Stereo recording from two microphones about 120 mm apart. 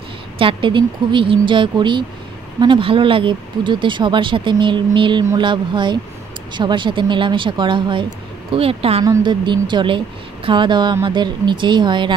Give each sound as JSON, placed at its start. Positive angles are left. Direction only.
{"t": 0.4, "sound": "speech", "side_deg": -45}
{"t": 9.2, "sound": "speech", "side_deg": -40}